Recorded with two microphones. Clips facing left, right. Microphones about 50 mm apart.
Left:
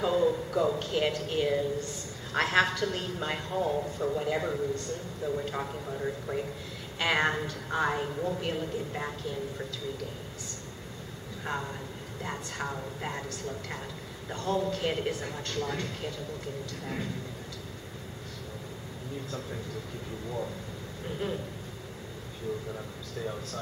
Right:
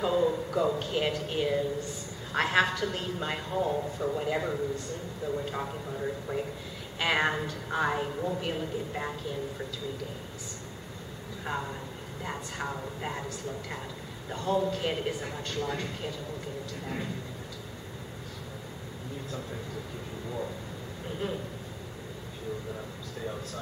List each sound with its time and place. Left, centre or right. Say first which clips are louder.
0.0 s a woman's voice: even; centre
11.4 s a woman's voice: even; centre